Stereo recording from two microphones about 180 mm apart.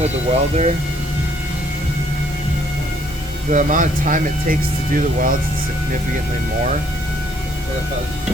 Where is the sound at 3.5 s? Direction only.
45° right (ahead or behind).